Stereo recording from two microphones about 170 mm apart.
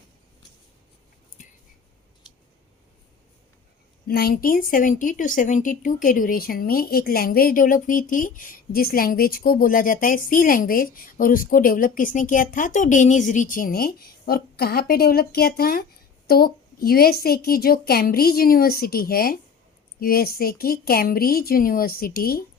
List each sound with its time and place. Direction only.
4.0 s speech: 65° left (ahead or behind)